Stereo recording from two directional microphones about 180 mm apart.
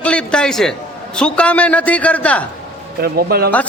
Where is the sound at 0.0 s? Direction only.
5° left (ahead or behind).